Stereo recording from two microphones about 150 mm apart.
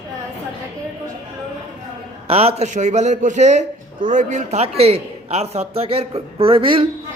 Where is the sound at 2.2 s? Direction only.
40° right (ahead or behind).